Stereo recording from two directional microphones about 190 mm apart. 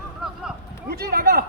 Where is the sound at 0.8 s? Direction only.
55° right (ahead or behind).